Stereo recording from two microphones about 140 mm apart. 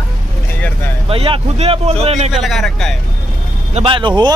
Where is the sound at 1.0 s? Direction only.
40° right (ahead or behind).